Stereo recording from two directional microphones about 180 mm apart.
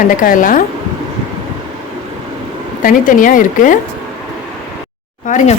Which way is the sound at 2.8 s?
50° left (ahead or behind).